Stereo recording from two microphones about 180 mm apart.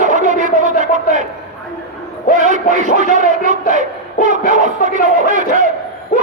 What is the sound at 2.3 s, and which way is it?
Music, 45° right (ahead or behind).